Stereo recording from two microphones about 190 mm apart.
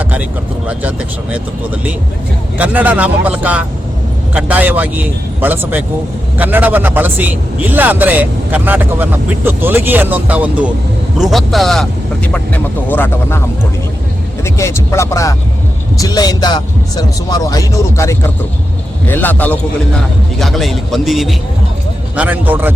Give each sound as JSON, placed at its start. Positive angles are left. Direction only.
{"t": 0.0, "sound": "vehicle", "side_deg": -5}
{"t": 0.7, "sound": "speech", "side_deg": -5}
{"t": 14.4, "sound": "a man's voice", "side_deg": 15}